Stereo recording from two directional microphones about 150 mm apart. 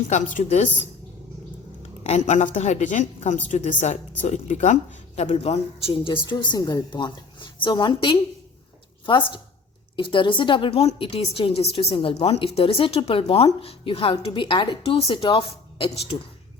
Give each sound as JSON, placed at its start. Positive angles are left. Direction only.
{"t": 0.3, "sound": "a woman's voice", "side_deg": 55}
{"t": 2.0, "sound": "a woman's voice", "side_deg": 50}